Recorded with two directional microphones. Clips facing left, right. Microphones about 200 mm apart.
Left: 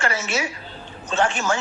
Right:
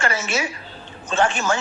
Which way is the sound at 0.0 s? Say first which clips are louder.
Right 1 dB; 50° right (ahead or behind).